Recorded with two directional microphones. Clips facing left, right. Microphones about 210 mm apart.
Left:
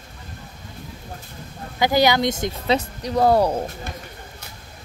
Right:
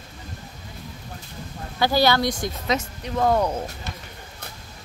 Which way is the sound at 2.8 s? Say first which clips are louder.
Left 4 dB; 35° left (ahead or behind).